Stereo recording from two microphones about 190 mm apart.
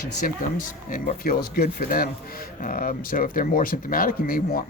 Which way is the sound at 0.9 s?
45° left (ahead or behind).